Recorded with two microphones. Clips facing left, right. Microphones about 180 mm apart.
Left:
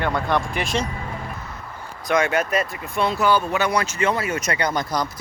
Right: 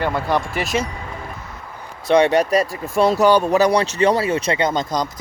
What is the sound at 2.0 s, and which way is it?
Speech, 35° right (ahead or behind).